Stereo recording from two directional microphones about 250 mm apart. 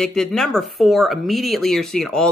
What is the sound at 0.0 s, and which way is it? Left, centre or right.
Speech, centre.